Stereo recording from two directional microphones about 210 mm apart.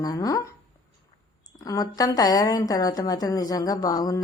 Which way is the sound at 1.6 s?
15° left (ahead or behind).